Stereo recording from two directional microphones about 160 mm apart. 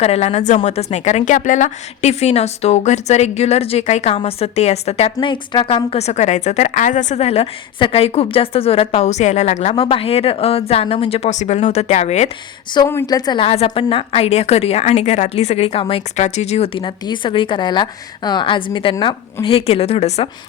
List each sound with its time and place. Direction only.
0.0 s speech: 40° left (ahead or behind)
12.9 s a woman's voice: 20° left (ahead or behind); by 20.3 s 40° left (ahead or behind)